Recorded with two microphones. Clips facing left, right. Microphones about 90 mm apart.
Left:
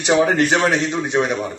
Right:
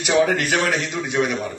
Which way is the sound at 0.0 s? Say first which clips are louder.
Left 3 dB; 25° left (ahead or behind).